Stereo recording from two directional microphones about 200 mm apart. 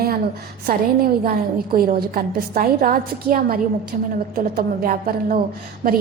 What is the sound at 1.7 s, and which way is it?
A woman's voice, 50° right (ahead or behind).